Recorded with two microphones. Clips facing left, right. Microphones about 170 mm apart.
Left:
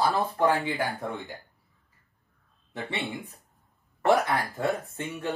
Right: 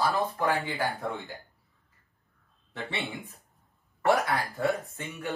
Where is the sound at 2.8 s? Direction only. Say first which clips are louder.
Left 2 dB; 20° left (ahead or behind).